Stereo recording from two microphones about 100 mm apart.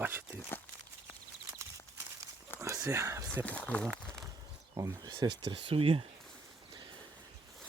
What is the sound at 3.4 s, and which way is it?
Speech, 15° left (ahead or behind).